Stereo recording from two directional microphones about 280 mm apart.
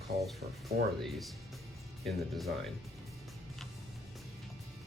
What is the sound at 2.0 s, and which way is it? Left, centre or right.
Speech, centre.